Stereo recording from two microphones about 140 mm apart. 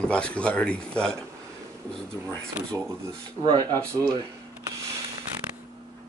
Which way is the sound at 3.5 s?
30° right (ahead or behind).